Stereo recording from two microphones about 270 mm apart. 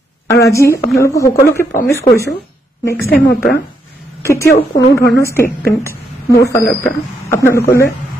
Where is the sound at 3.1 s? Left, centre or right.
Left.